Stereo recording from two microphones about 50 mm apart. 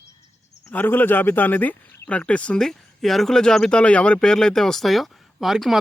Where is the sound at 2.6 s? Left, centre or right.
Centre.